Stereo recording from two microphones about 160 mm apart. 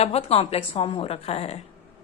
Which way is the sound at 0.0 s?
40° left (ahead or behind).